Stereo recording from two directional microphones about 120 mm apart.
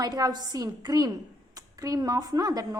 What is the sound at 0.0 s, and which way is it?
Speech, 35° right (ahead or behind).